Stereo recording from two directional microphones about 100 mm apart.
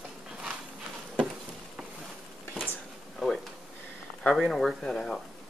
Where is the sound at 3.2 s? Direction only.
5° right (ahead or behind).